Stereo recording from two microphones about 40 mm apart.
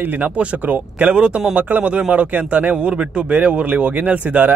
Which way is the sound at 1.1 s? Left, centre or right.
Right.